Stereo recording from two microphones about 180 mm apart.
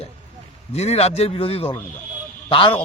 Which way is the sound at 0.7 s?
35° left (ahead or behind).